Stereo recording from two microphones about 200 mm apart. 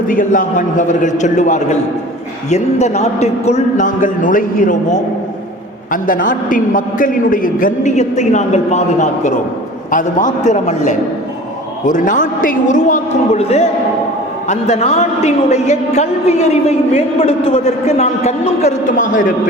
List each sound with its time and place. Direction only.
0.1 s a woman's voice: 40° left (ahead or behind)